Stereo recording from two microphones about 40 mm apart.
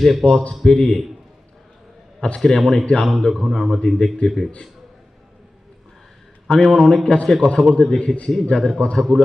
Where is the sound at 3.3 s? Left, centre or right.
Centre.